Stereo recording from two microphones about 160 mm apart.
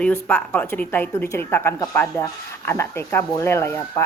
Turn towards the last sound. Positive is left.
turn(degrees=15)  # may be behind; listen again after turning